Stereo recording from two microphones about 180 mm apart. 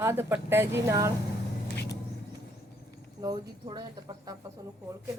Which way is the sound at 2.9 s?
20° right (ahead or behind).